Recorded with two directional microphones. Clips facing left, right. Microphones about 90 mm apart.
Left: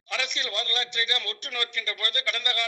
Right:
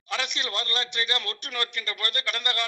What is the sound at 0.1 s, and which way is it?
A man's voice, 30° right (ahead or behind).